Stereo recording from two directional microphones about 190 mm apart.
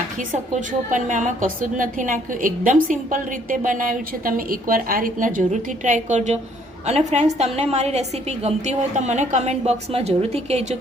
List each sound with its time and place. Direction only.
0.2 s a woman's voice: 40° right (ahead or behind)